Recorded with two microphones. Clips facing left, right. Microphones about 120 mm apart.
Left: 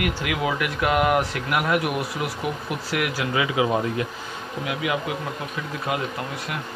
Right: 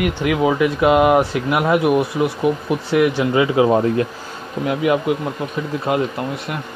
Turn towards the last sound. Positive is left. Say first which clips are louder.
# right 7 dB
turn(degrees=-30)  # may be behind; listen again after turning